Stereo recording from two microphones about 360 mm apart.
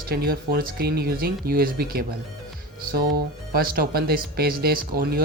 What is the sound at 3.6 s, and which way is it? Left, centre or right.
Speech, right.